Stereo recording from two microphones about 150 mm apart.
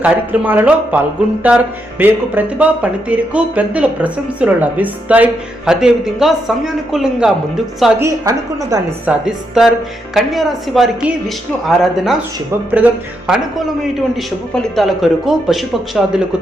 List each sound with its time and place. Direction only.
0.0 s speech: 10° right (ahead or behind)
7.9 s a woman's voice: 20° right (ahead or behind)
9.0 s speech: 5° right (ahead or behind)